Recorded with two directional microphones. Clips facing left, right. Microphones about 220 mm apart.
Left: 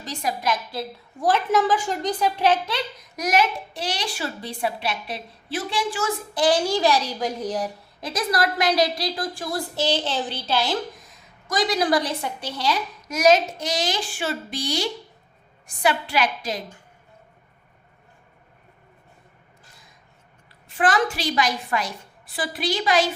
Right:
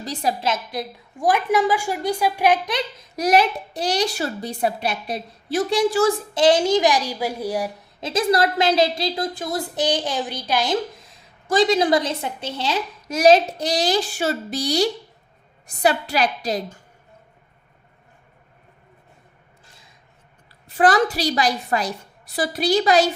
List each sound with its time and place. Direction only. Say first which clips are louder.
0.0 s a woman's voice: right 3 dB; 35° right (ahead or behind); by 2.8 s 15° right (ahead or behind)
3.2 s a woman's voice: right 4 dB; 35° right (ahead or behind)
6.3 s a woman's voice: right 2 dB; 25° right (ahead or behind)
8.0 s a woman's voice: right 5 dB; 25° right (ahead or behind)
11.1 s a woman's voice: right 8 dB; 30° right (ahead or behind)
20.7 s a woman's voice: right 4 dB; 40° right (ahead or behind)